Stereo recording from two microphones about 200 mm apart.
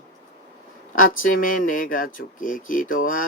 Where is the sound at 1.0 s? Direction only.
45° left (ahead or behind).